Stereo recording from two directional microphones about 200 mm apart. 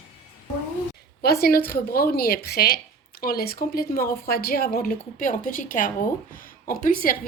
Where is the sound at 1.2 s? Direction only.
50° left (ahead or behind).